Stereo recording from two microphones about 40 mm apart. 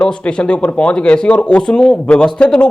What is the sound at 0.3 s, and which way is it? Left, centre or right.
Speech, left.